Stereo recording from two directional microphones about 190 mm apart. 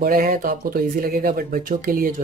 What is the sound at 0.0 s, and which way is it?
Speech, 50° right (ahead or behind).